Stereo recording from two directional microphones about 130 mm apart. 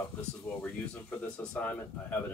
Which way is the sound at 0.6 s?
10° left (ahead or behind).